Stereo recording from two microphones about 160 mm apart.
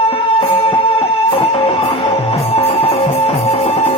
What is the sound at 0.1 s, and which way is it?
Music, 40° left (ahead or behind).